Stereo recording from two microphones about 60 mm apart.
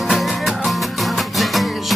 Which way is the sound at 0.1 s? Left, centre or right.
Centre.